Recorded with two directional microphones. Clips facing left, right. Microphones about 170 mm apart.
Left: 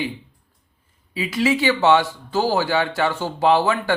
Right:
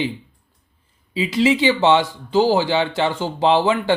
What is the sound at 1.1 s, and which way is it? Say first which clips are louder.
Speech: right 3 dB; 25° right (ahead or behind).